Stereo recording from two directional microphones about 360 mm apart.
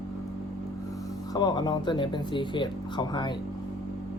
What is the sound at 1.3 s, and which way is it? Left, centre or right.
Speech, centre.